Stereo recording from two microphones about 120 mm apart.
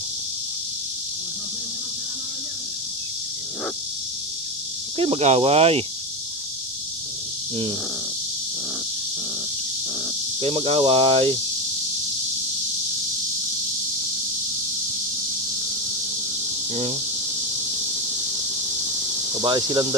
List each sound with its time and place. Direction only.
4.9 s speech: 55° right (ahead or behind)
10.4 s speech: 55° right (ahead or behind)
18.8 s insect: 25° right (ahead or behind)